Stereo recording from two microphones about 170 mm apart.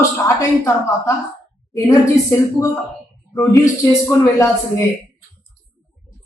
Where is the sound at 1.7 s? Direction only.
20° left (ahead or behind).